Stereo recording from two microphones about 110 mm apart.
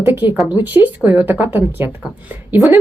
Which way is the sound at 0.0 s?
20° right (ahead or behind).